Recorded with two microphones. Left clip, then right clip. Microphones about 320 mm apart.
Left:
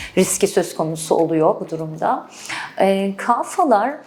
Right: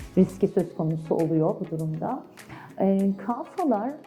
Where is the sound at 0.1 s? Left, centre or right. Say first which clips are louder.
Left 6 dB; centre.